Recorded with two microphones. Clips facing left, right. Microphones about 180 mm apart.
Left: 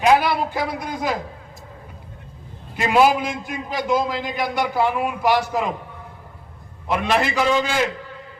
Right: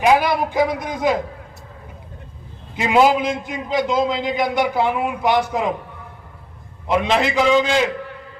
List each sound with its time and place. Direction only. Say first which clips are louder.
0.2 s speech: right 4 dB; 15° right (ahead or behind)
2.7 s a man's voice: right 1 dB; 20° right (ahead or behind)
6.8 s a man's voice: right 2 dB; 20° right (ahead or behind)